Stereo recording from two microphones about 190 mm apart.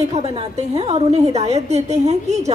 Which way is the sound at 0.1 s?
30° right (ahead or behind).